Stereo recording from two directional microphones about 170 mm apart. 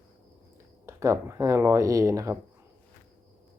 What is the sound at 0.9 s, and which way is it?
Speech, 15° right (ahead or behind).